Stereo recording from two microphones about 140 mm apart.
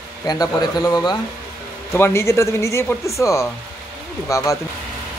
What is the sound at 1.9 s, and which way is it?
Speech, 20° left (ahead or behind).